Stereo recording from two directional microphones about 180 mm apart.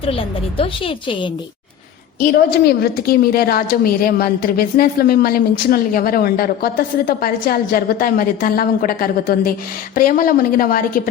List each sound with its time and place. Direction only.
0.0 s a woman's voice: 30° left (ahead or behind)
2.2 s a woman's voice: 60° left (ahead or behind)